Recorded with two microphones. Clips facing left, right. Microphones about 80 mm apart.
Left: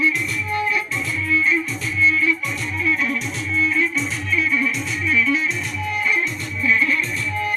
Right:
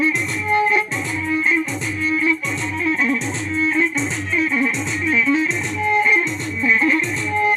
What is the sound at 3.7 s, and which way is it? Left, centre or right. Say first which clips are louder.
Music: right 2 dB; right.